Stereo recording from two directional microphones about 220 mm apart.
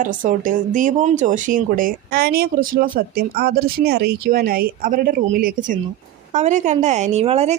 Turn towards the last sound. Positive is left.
turn(degrees=-30)  # may be behind; listen again after turning